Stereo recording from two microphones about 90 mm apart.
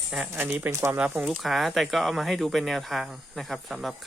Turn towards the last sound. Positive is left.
turn(degrees=0)  # may be behind; listen again after turning